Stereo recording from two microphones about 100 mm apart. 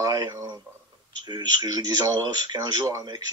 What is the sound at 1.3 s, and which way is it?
A man's voice, 45° right (ahead or behind).